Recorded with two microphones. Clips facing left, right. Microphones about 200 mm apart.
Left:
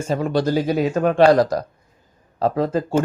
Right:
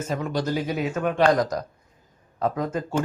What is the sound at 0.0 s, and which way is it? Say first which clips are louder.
Speech: left 6 dB; 30° left (ahead or behind).